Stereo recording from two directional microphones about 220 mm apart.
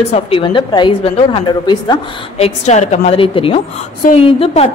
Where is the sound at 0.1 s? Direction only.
25° left (ahead or behind).